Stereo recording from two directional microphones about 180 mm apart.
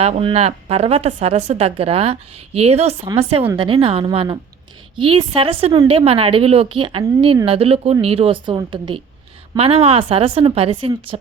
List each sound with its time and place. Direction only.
0.0 s a woman's voice: 35° right (ahead or behind)